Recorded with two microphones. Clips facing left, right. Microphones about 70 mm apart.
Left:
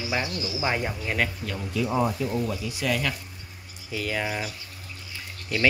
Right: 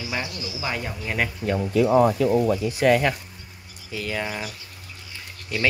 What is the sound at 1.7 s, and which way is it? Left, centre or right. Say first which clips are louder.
Speech: right 7 dB; right.